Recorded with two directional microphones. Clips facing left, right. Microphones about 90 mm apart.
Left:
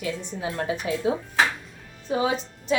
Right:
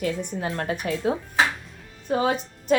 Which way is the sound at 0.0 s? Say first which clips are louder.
Right 3 dB; 45° right (ahead or behind).